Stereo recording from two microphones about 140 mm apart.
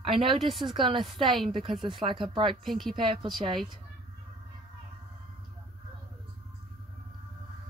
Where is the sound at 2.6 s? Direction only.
Centre (ahead or behind).